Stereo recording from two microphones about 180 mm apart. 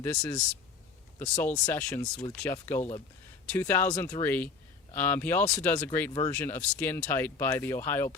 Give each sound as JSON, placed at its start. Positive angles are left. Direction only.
{"t": 0.0, "sound": "speech", "side_deg": 15}